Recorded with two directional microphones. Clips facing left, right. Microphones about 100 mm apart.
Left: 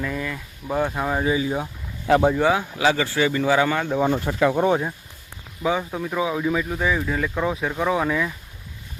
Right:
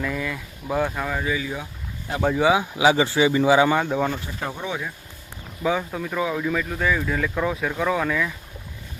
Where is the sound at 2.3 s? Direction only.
5° right (ahead or behind).